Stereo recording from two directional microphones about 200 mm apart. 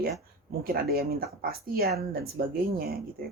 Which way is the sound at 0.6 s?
50° right (ahead or behind).